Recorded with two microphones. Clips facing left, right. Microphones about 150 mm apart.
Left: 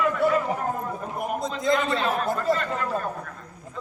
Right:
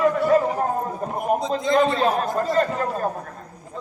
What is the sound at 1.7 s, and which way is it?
A man's voice, 40° right (ahead or behind).